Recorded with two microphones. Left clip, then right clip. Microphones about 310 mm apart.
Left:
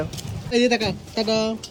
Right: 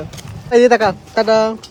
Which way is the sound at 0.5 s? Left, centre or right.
Centre.